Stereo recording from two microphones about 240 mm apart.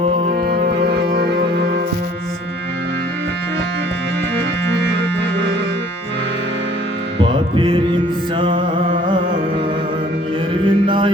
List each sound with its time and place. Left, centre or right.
0.3 s music: right
4.7 s music: right
7.2 s music: right
10.5 s a sound: right